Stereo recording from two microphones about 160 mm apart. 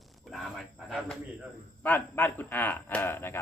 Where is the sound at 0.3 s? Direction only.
Centre (ahead or behind).